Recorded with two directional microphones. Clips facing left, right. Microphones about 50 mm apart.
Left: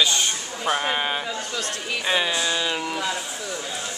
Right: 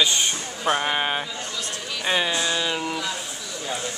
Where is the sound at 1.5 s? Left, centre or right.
Left.